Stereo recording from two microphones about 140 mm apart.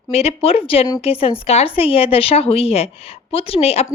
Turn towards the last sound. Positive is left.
turn(degrees=45)  # may be behind; listen again after turning